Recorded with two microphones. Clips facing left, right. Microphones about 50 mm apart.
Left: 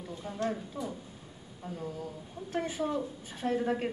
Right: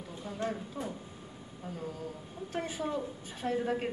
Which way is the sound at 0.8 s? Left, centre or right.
Right.